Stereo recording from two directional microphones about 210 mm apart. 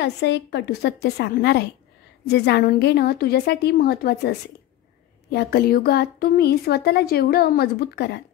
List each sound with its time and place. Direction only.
0.0 s speech: 55° left (ahead or behind)